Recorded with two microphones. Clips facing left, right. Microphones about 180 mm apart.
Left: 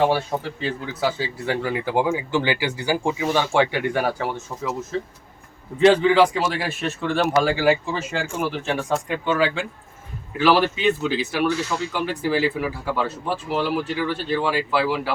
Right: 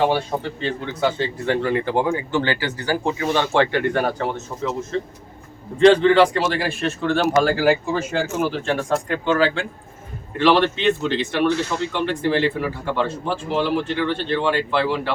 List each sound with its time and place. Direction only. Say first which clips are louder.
0.0 s a man's voice: even; 5° left (ahead or behind)